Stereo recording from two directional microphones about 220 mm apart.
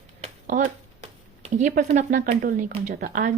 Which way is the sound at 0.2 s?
35° right (ahead or behind).